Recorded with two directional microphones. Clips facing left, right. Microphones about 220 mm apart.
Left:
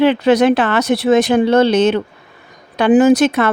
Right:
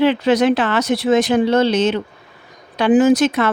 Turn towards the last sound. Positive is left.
turn(degrees=60)  # may be behind; listen again after turning